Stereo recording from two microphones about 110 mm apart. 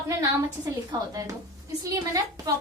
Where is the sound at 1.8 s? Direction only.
30° right (ahead or behind).